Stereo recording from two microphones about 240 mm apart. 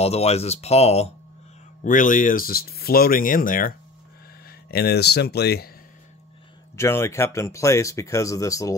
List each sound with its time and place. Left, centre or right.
0.0 s speech: left
6.8 s speech: centre